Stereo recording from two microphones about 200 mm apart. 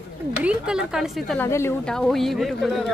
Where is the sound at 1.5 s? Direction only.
15° left (ahead or behind).